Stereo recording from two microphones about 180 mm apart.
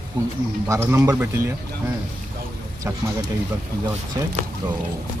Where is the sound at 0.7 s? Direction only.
15° right (ahead or behind).